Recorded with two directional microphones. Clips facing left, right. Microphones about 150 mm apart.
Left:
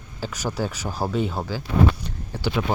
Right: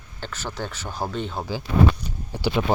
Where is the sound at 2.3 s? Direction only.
20° right (ahead or behind).